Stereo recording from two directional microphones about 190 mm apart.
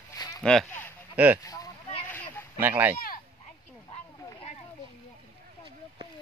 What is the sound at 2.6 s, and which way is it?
Speech, 10° right (ahead or behind).